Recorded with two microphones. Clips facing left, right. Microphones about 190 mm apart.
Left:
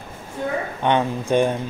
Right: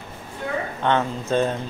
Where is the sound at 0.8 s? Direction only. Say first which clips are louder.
Left 2 dB; 15° left (ahead or behind).